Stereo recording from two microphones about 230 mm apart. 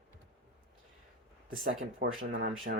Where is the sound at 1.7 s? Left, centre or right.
Right.